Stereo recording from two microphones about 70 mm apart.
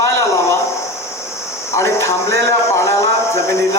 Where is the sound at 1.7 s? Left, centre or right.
Left.